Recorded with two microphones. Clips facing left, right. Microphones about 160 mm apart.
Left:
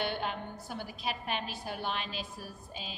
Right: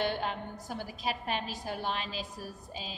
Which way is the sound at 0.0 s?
35° right (ahead or behind).